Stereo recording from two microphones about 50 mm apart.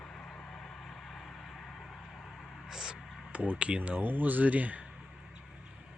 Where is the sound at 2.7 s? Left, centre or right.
Centre.